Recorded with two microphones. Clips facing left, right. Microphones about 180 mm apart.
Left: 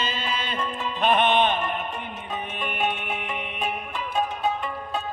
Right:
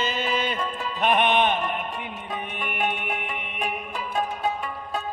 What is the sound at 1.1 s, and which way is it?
Music, 15° right (ahead or behind).